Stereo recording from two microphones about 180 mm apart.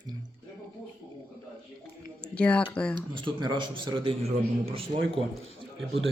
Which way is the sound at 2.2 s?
5° left (ahead or behind).